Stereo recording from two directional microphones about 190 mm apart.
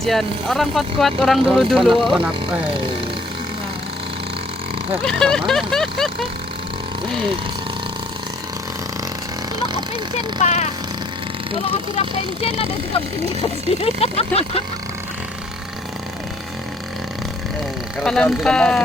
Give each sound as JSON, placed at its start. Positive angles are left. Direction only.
{"t": 0.0, "sound": "speech", "side_deg": 0}
{"t": 5.0, "sound": "speech", "side_deg": 5}
{"t": 9.7, "sound": "speech", "side_deg": 35}
{"t": 18.0, "sound": "speech", "side_deg": 5}